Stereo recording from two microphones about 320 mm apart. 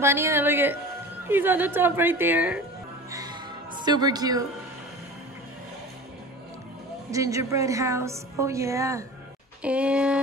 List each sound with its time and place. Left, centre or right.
0.0 s a woman's voice: centre
3.1 s music: centre
7.1 s a woman's voice: centre
9.6 s a sound: centre